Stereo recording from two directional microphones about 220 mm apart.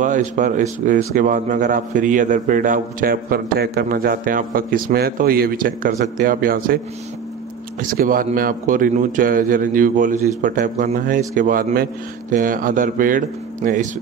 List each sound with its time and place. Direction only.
0.0 s speech: 35° right (ahead or behind)
7.8 s speech: 40° right (ahead or behind)